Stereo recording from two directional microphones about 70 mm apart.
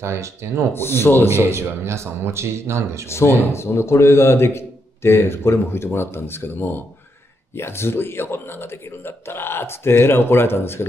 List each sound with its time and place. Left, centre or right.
0.0 s speech: right
0.7 s a man's voice: left
1.5 s speech: right
3.1 s a man's voice: left